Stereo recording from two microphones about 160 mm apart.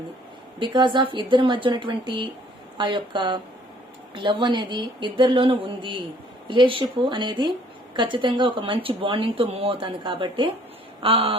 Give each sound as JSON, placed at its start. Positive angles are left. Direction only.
{"t": 0.6, "sound": "a woman's voice", "side_deg": -30}